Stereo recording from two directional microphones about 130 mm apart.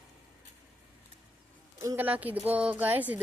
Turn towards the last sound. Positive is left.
turn(degrees=-15)  # may be behind; listen again after turning